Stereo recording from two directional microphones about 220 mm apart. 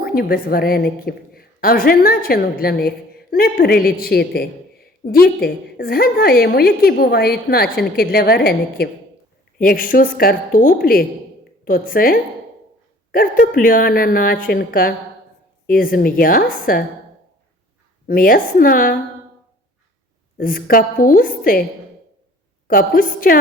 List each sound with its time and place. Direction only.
0.0 s a woman's voice: 45° left (ahead or behind)
18.0 s a woman's voice: 40° left (ahead or behind)
20.4 s a woman's voice: 40° left (ahead or behind)
22.6 s a woman's voice: 40° left (ahead or behind)